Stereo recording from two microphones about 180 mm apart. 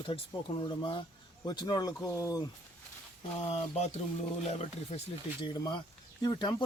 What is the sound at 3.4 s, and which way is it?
Speech, 40° left (ahead or behind).